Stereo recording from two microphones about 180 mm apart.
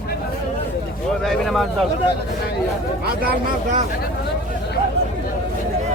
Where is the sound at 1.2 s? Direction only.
Centre (ahead or behind).